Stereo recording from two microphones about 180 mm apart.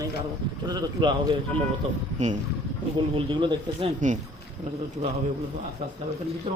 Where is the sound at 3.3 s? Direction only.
25° right (ahead or behind).